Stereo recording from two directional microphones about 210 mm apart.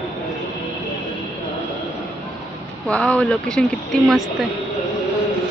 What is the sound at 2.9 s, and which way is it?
Speech, 5° left (ahead or behind).